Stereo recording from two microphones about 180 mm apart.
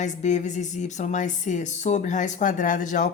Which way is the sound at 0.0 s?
40° left (ahead or behind).